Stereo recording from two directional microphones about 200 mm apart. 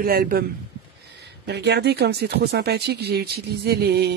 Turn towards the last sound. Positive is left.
turn(degrees=-55)  # may be behind; listen again after turning